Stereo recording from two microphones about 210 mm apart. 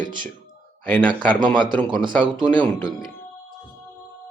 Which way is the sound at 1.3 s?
20° right (ahead or behind).